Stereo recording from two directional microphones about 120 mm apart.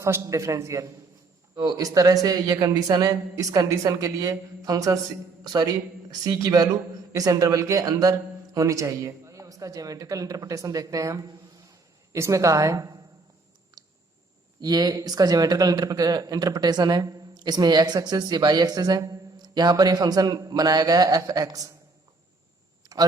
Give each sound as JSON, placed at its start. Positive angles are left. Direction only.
{"t": 0.0, "sound": "a man's voice", "side_deg": -25}
{"t": 14.6, "sound": "speech", "side_deg": -35}
{"t": 22.8, "sound": "a sound", "side_deg": -30}